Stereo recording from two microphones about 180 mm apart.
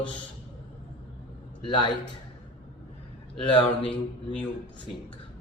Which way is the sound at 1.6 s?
25° left (ahead or behind).